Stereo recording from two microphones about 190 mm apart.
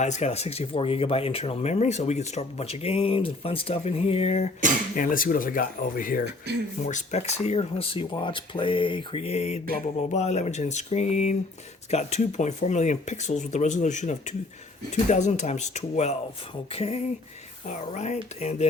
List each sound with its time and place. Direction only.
0.0 s speech: 35° left (ahead or behind)
4.9 s speech: 45° left (ahead or behind)
6.8 s speech: 35° left (ahead or behind)